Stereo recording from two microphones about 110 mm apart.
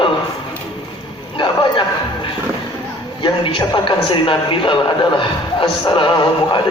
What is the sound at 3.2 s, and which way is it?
A man's voice, 45° left (ahead or behind).